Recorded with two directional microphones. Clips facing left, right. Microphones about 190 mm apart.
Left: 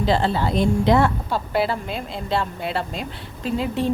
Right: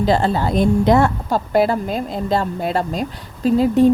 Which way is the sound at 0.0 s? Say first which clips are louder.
Right 3 dB; 45° right (ahead or behind).